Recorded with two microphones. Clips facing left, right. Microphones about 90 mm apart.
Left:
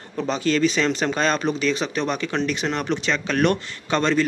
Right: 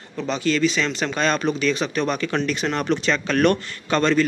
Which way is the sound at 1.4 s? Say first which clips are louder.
Right 1 dB; 25° left (ahead or behind).